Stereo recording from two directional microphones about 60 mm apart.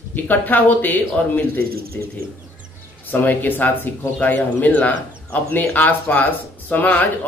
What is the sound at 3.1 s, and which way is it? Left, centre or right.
Speech, left.